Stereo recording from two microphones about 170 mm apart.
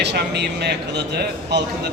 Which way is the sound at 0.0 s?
80° right.